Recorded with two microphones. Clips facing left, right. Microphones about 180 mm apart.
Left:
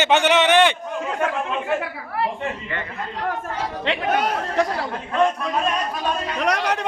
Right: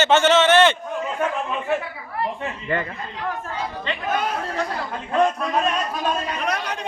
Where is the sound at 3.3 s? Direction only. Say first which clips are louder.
Left 1 dB; 70° left (ahead or behind).